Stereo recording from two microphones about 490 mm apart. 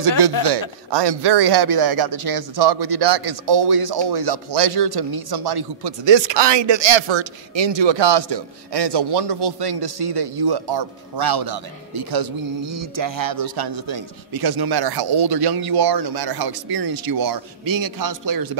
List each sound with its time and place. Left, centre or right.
0.4 s speech: right
1.0 s speech: right
12.6 s speech: right